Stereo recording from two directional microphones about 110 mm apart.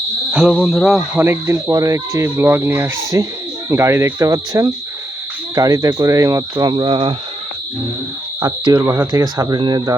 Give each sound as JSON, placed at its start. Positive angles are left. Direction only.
{"t": 0.3, "sound": "cricket", "side_deg": -5}
{"t": 1.1, "sound": "speech", "side_deg": -20}
{"t": 6.7, "sound": "speech", "side_deg": -50}
{"t": 8.8, "sound": "speech", "side_deg": -25}